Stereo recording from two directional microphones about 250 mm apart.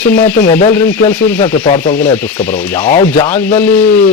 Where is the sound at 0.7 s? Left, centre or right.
Centre.